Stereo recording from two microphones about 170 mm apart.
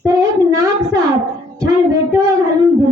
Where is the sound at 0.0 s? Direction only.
20° right (ahead or behind).